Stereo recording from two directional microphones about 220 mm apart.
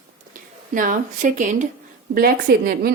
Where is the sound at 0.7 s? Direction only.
35° right (ahead or behind).